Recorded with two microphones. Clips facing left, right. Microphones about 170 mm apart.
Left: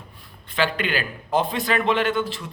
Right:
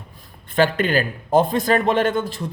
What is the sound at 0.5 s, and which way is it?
A man's voice, 45° right (ahead or behind).